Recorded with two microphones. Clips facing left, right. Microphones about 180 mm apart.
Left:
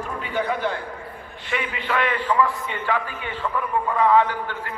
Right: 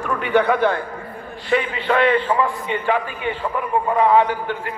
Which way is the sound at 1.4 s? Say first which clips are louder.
Right 8 dB; 35° right (ahead or behind).